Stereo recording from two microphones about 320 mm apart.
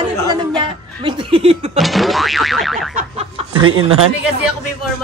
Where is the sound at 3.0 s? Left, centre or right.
Centre.